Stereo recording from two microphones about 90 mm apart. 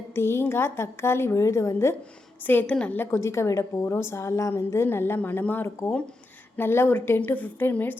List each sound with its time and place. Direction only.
0.1 s a woman's voice: 30° left (ahead or behind)
2.4 s a woman's voice: 20° left (ahead or behind)
3.1 s a woman's voice: 30° left (ahead or behind)